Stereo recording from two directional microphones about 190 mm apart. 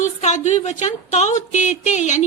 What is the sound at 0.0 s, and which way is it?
A woman's voice, 40° left (ahead or behind).